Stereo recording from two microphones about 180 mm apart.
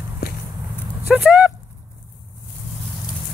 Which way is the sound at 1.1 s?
10° right (ahead or behind).